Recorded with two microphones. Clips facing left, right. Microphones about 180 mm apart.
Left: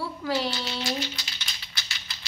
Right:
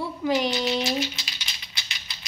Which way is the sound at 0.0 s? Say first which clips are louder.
Right 4 dB; 15° right (ahead or behind).